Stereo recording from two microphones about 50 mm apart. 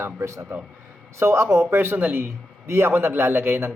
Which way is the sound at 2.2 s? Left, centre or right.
Right.